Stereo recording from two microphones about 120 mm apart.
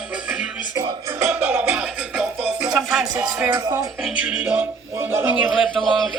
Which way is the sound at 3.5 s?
35° right (ahead or behind).